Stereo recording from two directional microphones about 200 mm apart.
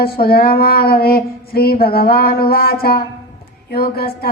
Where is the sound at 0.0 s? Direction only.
50° left (ahead or behind).